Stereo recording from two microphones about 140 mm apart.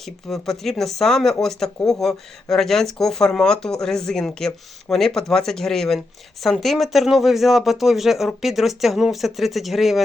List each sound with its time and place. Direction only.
0.0 s speech: centre (ahead or behind)